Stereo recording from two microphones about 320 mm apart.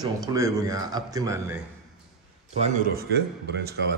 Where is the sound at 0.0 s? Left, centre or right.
Centre.